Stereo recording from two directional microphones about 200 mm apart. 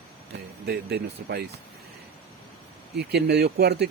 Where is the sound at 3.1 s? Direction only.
55° right (ahead or behind).